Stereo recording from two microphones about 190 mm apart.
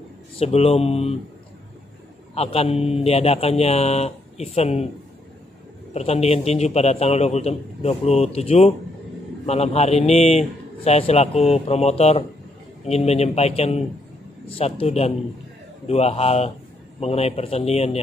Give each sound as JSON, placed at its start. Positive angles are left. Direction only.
{"t": 0.4, "sound": "a man's voice", "side_deg": 30}
{"t": 2.3, "sound": "a man's voice", "side_deg": 30}
{"t": 5.9, "sound": "a man's voice", "side_deg": 35}